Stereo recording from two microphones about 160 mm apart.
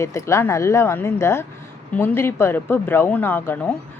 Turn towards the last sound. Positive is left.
turn(degrees=15)  # may be behind; listen again after turning